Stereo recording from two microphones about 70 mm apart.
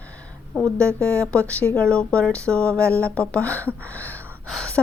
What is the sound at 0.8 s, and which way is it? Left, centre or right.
Speech, right.